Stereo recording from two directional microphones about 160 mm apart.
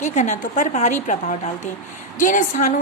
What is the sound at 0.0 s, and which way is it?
A woman's voice, 50° left (ahead or behind).